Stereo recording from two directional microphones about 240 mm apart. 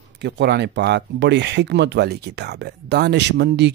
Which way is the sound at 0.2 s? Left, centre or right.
Right.